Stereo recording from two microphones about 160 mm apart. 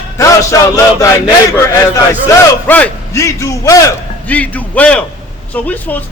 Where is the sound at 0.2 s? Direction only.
20° left (ahead or behind).